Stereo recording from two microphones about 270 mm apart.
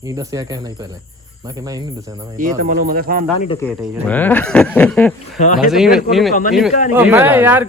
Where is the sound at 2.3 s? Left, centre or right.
Right.